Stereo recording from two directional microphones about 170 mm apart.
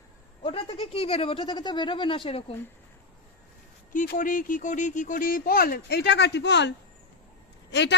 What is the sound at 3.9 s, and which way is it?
Speech, 55° left (ahead or behind).